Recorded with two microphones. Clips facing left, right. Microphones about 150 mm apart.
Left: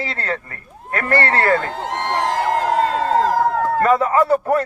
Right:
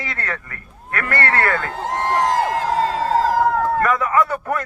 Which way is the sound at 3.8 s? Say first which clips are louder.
Left 3 dB; 30° left (ahead or behind).